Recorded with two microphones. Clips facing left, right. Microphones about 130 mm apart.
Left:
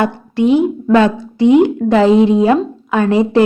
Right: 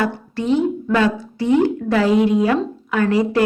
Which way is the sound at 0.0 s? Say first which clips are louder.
Left 7 dB; 15° left (ahead or behind).